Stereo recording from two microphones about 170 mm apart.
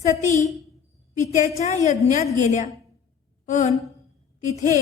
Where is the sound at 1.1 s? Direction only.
45° left (ahead or behind).